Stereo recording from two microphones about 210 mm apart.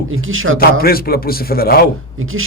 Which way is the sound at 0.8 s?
45° left (ahead or behind).